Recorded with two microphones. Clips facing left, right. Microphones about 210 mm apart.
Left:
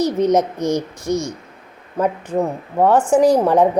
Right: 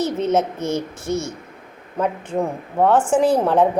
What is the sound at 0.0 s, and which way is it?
A woman's voice, 15° left (ahead or behind).